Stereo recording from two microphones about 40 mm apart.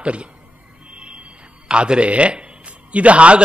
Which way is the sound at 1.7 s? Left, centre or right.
Right.